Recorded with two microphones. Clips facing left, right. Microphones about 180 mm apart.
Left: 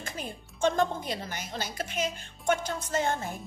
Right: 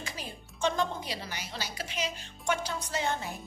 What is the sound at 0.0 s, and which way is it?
A woman's voice, 50° left (ahead or behind).